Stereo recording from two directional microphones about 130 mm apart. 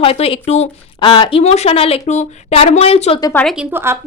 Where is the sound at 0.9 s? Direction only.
40° left (ahead or behind).